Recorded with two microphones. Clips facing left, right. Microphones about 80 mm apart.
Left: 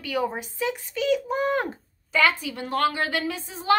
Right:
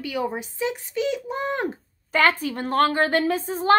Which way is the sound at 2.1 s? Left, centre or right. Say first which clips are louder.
Right 2 dB; right.